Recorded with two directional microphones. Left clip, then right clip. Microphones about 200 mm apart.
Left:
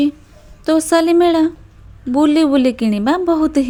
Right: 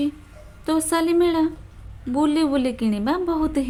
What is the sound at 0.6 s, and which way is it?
A woman's voice, 25° left (ahead or behind).